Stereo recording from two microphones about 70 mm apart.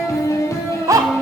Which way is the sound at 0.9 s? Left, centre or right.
Right.